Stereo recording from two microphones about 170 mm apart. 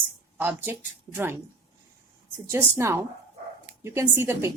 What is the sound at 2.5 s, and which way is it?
Speech, 15° right (ahead or behind).